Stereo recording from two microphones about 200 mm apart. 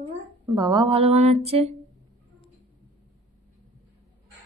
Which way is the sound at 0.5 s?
20° right (ahead or behind).